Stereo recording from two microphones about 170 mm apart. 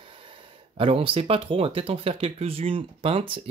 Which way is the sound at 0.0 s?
30° right (ahead or behind).